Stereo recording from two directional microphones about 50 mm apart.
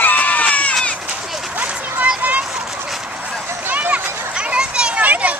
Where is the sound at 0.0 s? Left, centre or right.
Left.